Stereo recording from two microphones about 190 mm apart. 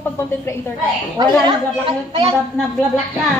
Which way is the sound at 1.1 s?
25° right (ahead or behind).